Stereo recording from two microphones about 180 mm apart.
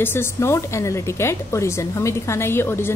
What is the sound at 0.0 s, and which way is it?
A woman's voice, 10° left (ahead or behind).